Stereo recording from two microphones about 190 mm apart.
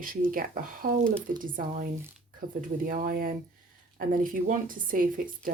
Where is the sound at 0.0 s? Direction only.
45° right (ahead or behind).